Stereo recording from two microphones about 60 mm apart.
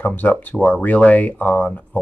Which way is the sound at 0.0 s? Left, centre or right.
Left.